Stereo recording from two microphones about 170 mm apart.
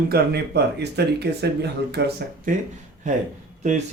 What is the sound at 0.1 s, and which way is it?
Speech, 75° right (ahead or behind).